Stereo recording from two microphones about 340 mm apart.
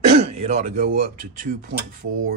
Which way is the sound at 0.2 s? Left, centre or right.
Centre.